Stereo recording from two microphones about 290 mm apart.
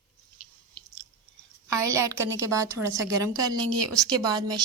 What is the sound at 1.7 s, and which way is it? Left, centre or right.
A woman's voice, centre.